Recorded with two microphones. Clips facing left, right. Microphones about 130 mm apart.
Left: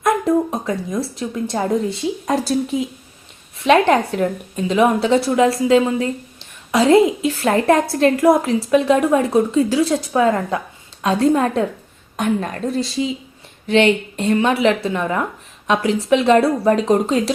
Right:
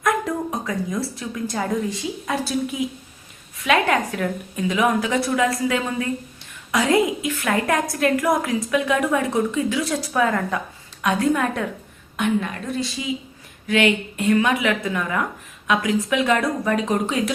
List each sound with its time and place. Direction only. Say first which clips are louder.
0.0 s a woman's voice: left 6 dB; 20° left (ahead or behind)